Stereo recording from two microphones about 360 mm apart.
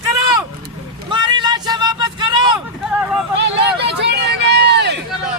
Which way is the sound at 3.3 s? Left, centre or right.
Right.